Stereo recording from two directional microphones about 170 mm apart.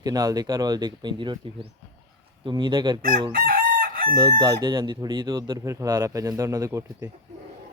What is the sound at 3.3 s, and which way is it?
Chicken, 55° right (ahead or behind).